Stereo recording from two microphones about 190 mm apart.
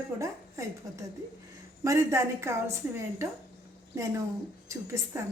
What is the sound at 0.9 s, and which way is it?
A woman's voice, 15° right (ahead or behind).